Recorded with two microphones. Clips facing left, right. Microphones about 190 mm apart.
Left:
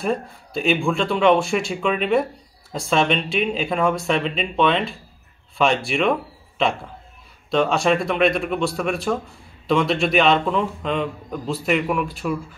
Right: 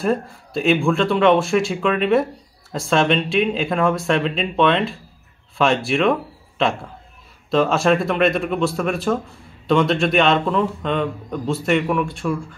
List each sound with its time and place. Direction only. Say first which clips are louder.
0.0 s speech: right 3 dB; centre (ahead or behind)